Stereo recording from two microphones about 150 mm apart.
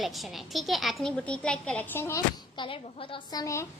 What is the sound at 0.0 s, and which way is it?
A woman's voice, centre (ahead or behind).